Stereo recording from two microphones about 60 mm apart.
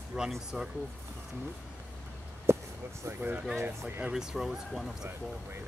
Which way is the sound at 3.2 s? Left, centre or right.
Right.